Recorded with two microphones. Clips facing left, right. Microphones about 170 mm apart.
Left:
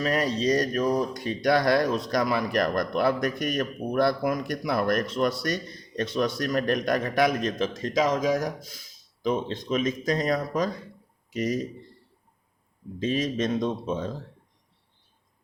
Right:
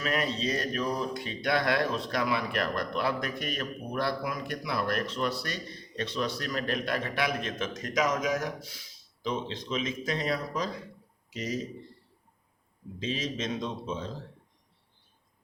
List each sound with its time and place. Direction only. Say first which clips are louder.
0.0 s speech: left 5 dB; 35° left (ahead or behind)
9.2 s a man's voice: left 6 dB; 50° left (ahead or behind)
13.0 s speech: left 7 dB; 50° left (ahead or behind)